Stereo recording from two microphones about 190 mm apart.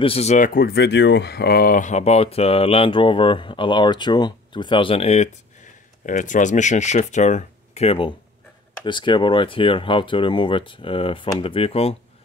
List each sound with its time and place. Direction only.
0.0 s speech: 35° left (ahead or behind)